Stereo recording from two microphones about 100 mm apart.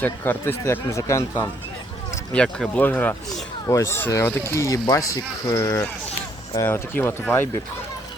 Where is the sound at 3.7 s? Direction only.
30° left (ahead or behind).